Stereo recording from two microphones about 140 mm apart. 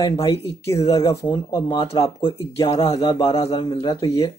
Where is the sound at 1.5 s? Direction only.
25° left (ahead or behind).